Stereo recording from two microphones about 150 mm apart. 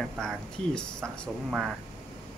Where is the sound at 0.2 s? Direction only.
5° left (ahead or behind).